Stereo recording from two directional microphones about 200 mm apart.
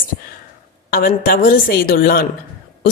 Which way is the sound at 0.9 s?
45° left (ahead or behind).